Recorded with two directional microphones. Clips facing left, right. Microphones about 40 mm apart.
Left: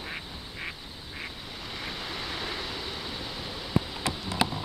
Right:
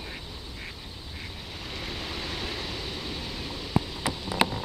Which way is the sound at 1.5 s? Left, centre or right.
Centre.